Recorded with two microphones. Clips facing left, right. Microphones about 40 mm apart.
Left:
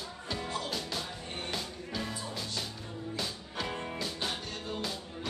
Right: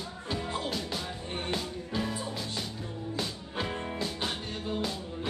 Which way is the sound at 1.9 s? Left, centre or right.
Right.